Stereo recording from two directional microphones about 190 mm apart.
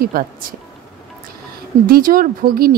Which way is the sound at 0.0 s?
50° right (ahead or behind).